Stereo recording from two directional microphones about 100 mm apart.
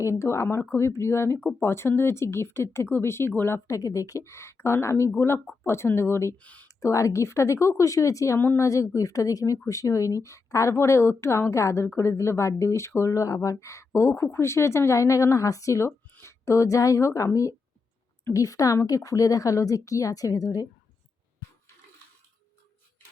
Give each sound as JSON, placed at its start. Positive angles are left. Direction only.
{"t": 0.0, "sound": "a woman's voice", "side_deg": 30}
{"t": 6.3, "sound": "speech", "side_deg": 15}
{"t": 6.7, "sound": "a woman's voice", "side_deg": 30}